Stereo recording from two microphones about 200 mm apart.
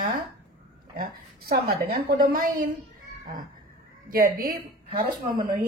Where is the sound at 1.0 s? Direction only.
50° right (ahead or behind).